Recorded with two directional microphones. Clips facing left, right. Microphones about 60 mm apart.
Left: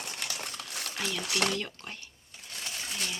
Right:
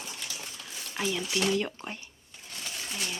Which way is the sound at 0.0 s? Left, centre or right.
Left.